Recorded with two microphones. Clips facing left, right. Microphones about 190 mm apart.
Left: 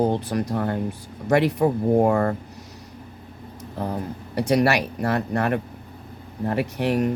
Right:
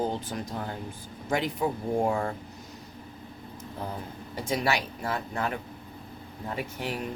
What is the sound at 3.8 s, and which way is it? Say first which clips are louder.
Speech: left 9 dB; 70° left (ahead or behind).